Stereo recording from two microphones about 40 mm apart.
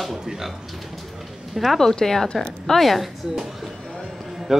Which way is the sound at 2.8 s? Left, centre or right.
Centre.